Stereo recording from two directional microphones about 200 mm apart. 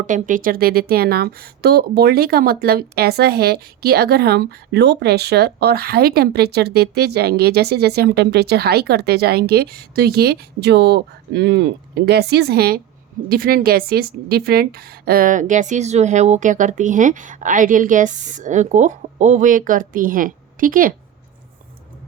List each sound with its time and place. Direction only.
0.0 s a woman's voice: 40° right (ahead or behind)